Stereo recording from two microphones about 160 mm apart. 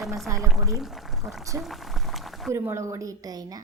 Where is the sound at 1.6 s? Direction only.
Centre (ahead or behind).